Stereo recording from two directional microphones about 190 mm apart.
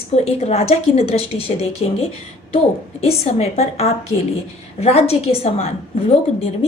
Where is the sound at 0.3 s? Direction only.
35° left (ahead or behind).